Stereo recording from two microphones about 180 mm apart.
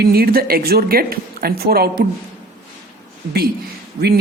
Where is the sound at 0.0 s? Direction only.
60° right (ahead or behind).